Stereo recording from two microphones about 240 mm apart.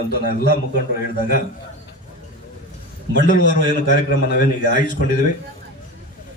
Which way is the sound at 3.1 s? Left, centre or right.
Left.